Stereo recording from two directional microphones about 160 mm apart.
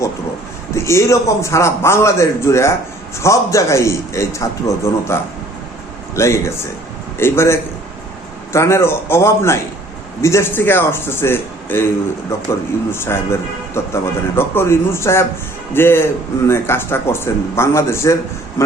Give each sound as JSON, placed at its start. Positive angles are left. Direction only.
{"t": 0.7, "sound": "a man's voice", "side_deg": 15}